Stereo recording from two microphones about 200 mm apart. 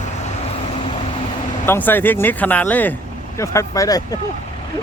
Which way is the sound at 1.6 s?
10° left (ahead or behind).